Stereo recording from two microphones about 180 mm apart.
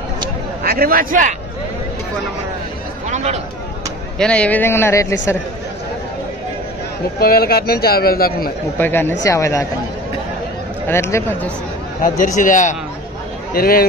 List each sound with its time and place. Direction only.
0.7 s a man's voice: 55° right (ahead or behind)
4.2 s a man's voice: 5° left (ahead or behind)
7.2 s a man's voice: 60° left (ahead or behind)
8.7 s a man's voice: 10° left (ahead or behind)
10.9 s a man's voice: 15° left (ahead or behind)
12.0 s a man's voice: 45° left (ahead or behind)
13.5 s speech: 55° left (ahead or behind)